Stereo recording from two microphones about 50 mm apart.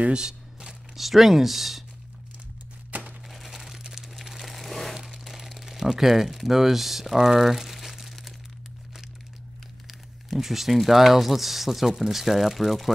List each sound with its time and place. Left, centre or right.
0.0 s speech: centre
2.9 s a sound: right
3.3 s crumpling: centre
9.8 s speech: centre